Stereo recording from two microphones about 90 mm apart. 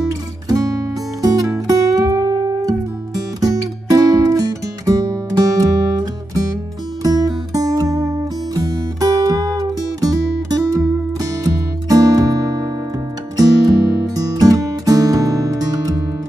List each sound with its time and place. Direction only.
0.5 s music: 40° right (ahead or behind)